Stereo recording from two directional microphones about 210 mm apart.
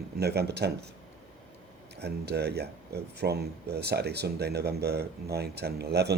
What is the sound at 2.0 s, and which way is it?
Speech, 50° right (ahead or behind).